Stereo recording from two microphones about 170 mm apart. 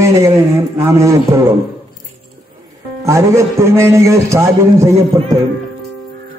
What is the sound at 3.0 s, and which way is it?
A man's voice, 15° right (ahead or behind).